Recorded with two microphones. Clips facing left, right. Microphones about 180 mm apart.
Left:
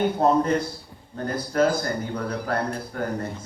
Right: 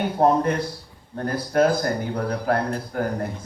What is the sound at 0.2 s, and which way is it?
Speech, 60° right (ahead or behind).